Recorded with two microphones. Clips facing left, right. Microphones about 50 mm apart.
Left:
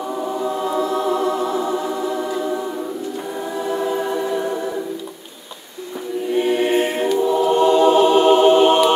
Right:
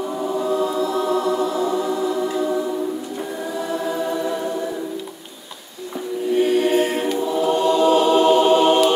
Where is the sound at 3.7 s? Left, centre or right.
Left.